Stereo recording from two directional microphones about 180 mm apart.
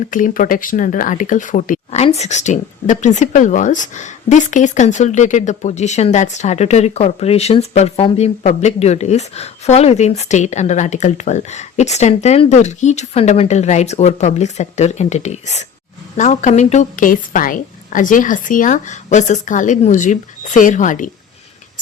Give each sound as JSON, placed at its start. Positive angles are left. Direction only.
{"t": 0.1, "sound": "a woman's voice", "side_deg": 45}